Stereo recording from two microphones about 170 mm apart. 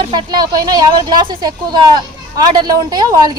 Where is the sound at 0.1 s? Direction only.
25° right (ahead or behind).